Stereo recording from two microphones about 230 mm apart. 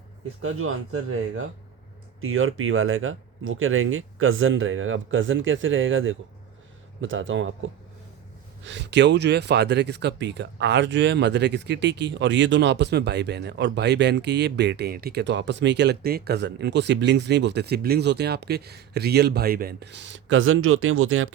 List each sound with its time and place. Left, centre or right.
0.4 s speech: right